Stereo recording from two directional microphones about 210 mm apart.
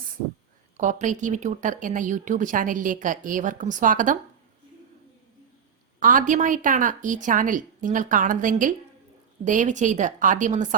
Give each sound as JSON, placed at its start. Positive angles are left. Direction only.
{"t": 0.8, "sound": "speech", "side_deg": -35}
{"t": 6.0, "sound": "speech", "side_deg": -40}